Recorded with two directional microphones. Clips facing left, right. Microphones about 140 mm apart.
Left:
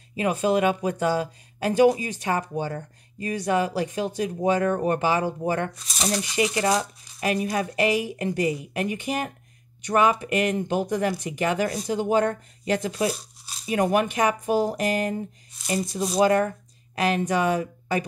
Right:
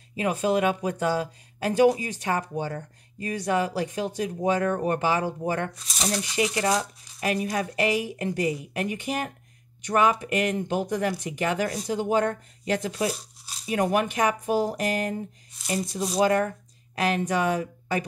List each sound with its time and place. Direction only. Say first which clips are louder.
0.1 s speech: left 2 dB; 15° left (ahead or behind)